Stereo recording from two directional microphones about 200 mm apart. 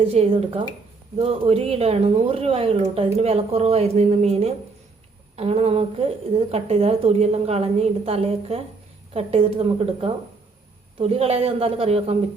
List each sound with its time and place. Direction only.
0.0 s a woman's voice: 30° right (ahead or behind)